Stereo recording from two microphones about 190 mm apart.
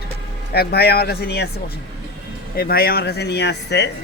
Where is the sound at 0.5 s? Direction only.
55° left (ahead or behind).